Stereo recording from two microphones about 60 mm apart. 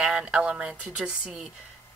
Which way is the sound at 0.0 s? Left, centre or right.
Centre.